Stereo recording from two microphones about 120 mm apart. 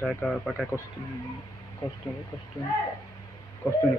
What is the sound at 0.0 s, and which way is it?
Speech, 5° left (ahead or behind).